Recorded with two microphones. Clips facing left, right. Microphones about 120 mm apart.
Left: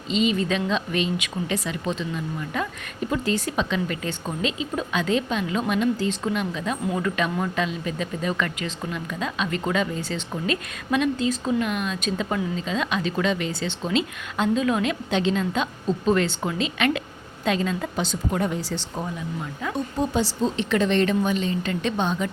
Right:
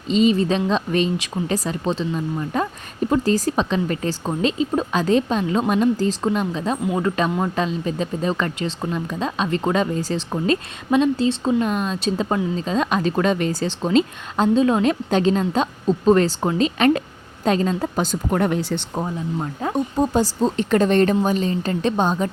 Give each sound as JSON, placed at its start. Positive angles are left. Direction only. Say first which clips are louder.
{"t": 0.1, "sound": "speech", "louder": "right 5 dB", "side_deg": -35}
{"t": 19.4, "sound": "speech", "louder": "right 6 dB", "side_deg": -45}